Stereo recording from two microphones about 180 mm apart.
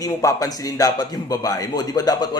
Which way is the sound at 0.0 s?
20° left (ahead or behind).